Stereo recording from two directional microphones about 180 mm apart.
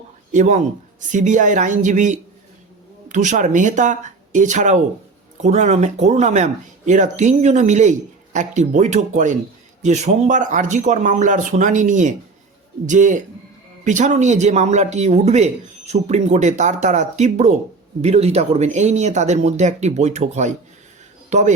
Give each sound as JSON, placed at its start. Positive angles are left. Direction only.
{"t": 0.3, "sound": "speech", "side_deg": -40}